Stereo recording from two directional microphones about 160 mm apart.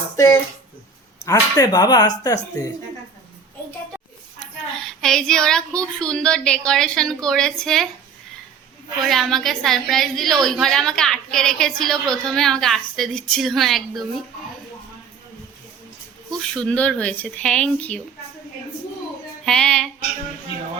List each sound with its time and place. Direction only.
1.2 s speech: 20° left (ahead or behind)
4.4 s a woman's voice: centre (ahead or behind)
9.0 s a woman's voice: centre (ahead or behind)
16.4 s speech: 5° left (ahead or behind)
19.5 s a woman's voice: 5° left (ahead or behind)